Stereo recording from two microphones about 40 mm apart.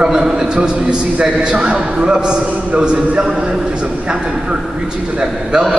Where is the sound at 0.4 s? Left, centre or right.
Right.